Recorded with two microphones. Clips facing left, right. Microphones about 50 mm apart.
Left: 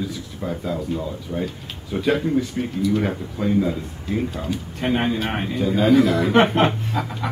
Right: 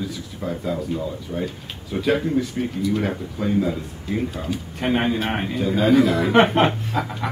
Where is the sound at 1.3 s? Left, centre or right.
Centre.